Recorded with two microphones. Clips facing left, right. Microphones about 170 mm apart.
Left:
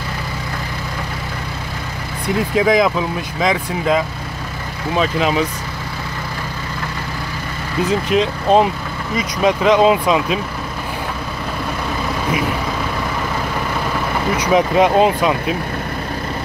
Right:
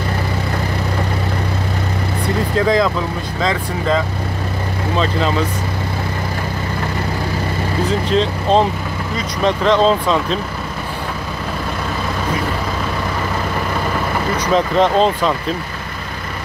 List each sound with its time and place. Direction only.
2.5 s speech: 15° left (ahead or behind)
8.1 s speech: 10° left (ahead or behind)
14.5 s speech: 10° left (ahead or behind)